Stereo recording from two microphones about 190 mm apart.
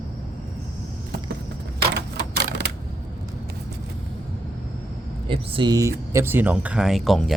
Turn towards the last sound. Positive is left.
turn(degrees=0)  # may be behind; listen again after turning